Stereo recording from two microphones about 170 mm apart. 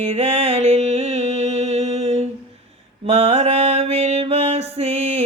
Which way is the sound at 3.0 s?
35° right (ahead or behind).